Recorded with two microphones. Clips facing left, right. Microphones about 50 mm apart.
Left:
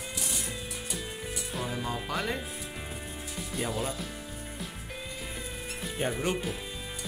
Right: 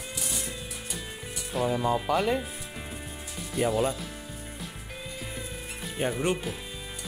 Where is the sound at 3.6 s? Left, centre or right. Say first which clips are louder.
Right 8 dB; centre.